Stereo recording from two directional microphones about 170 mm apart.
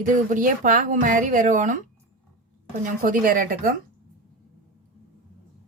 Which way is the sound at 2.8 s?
50° right (ahead or behind).